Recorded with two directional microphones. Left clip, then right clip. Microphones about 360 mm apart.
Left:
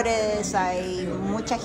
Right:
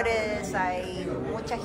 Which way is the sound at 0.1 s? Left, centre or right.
Centre.